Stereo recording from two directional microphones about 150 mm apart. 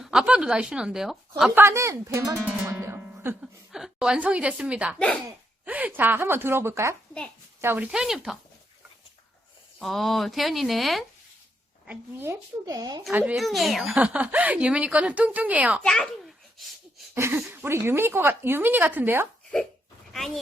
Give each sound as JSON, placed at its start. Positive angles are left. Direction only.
{"t": 0.0, "sound": "speech", "side_deg": -5}
{"t": 1.5, "sound": "a woman's voice", "side_deg": -15}
{"t": 2.5, "sound": "music", "side_deg": -10}
{"t": 3.4, "sound": "a woman's voice", "side_deg": -5}
{"t": 9.7, "sound": "speech", "side_deg": 0}
{"t": 11.9, "sound": "a woman's voice", "side_deg": -15}
{"t": 13.1, "sound": "a woman's voice", "side_deg": -5}
{"t": 15.8, "sound": "a sound", "side_deg": 5}
{"t": 17.2, "sound": "a woman's voice", "side_deg": -15}
{"t": 20.1, "sound": "speech", "side_deg": 0}